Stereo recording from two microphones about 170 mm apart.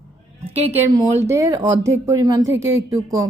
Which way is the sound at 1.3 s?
20° right (ahead or behind).